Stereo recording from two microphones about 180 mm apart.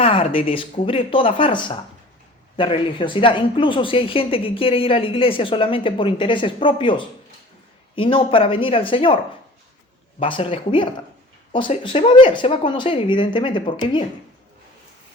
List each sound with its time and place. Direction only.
0.0 s a sound: 30° left (ahead or behind)
0.4 s a woman's voice: 30° left (ahead or behind)
10.2 s a woman's voice: 30° left (ahead or behind)